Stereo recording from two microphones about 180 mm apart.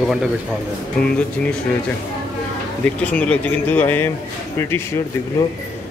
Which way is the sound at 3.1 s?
5° left (ahead or behind).